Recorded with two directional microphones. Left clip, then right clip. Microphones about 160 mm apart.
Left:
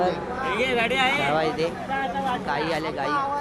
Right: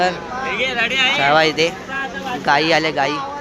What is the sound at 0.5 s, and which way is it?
Speech, 90° left.